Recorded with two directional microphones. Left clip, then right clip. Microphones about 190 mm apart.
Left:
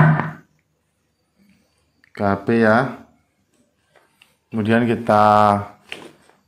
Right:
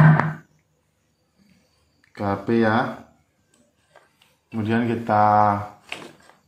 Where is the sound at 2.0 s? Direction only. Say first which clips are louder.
Left 5 dB; 60° left (ahead or behind).